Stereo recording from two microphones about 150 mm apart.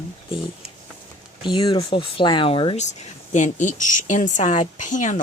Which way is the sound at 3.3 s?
55° left (ahead or behind).